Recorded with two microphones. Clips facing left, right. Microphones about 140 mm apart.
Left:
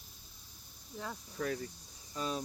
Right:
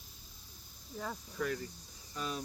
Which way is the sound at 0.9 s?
Centre (ahead or behind).